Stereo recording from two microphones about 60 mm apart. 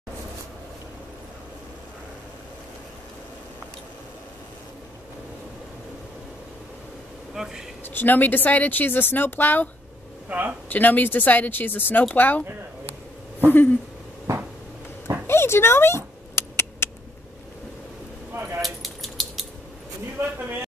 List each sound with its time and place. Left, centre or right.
7.3 s speech: centre
7.8 s speech: left
10.2 s speech: right
10.7 s speech: left
13.5 s speech: left
15.2 s mouse: left
18.6 s keys jangling: centre
20.2 s a sound: right